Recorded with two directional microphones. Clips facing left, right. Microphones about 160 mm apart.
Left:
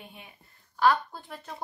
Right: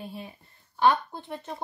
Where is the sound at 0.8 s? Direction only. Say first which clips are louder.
Right 1 dB; 25° right (ahead or behind).